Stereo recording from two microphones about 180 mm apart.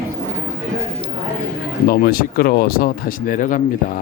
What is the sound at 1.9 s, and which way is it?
Speech, 55° left (ahead or behind).